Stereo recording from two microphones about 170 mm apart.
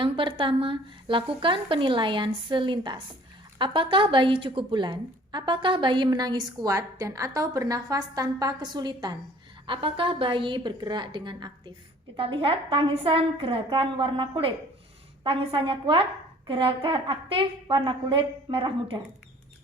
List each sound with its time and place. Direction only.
0.0 s a woman's voice: 30° right (ahead or behind)